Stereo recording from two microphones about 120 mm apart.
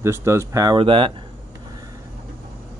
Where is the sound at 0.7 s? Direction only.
45° right (ahead or behind).